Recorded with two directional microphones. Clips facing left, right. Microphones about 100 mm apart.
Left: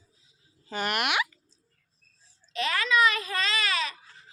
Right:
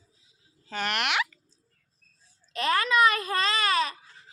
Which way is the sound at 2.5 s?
45° right (ahead or behind).